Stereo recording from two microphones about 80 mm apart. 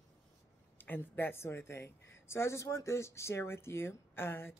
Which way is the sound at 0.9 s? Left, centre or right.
Left.